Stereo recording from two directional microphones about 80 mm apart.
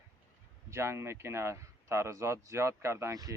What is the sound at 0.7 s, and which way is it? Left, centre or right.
Speech, right.